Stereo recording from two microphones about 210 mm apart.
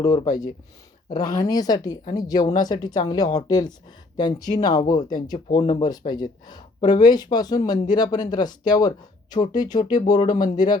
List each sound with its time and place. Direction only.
0.0 s speech: 20° left (ahead or behind)